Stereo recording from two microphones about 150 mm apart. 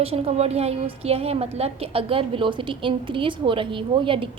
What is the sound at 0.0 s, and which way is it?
A woman's voice, 40° right (ahead or behind).